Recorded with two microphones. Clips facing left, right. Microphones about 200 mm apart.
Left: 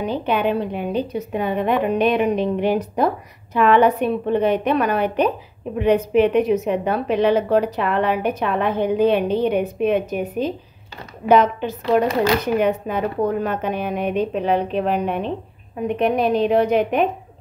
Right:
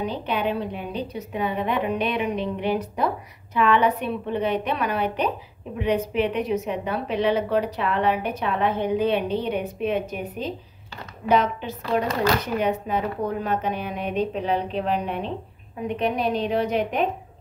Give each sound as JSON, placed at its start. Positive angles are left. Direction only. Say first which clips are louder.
{"t": 0.3, "sound": "a woman's voice", "louder": "left 6 dB", "side_deg": 55}